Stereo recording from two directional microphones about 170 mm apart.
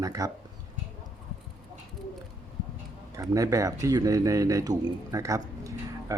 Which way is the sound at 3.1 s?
20° right (ahead or behind).